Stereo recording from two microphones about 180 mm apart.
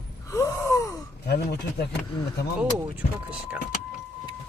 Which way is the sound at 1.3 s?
65° left (ahead or behind).